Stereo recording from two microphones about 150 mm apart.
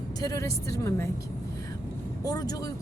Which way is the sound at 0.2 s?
20° left (ahead or behind).